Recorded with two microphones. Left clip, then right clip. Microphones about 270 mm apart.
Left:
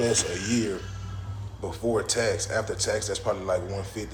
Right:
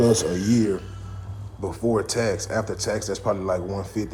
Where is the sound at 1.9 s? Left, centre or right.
Right.